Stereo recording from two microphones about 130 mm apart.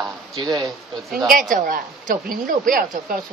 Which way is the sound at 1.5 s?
85° right.